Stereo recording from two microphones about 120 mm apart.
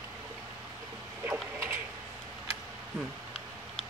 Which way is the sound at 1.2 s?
20° right (ahead or behind).